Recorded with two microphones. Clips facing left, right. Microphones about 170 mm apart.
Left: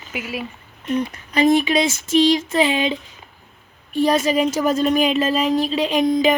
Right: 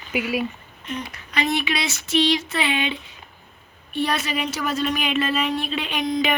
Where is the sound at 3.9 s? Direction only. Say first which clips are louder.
Left 7 dB; 40° left (ahead or behind).